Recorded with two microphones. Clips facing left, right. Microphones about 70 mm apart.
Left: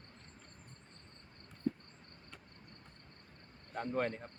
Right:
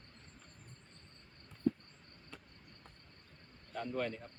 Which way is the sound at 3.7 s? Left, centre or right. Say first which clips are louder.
Left 2 dB; left.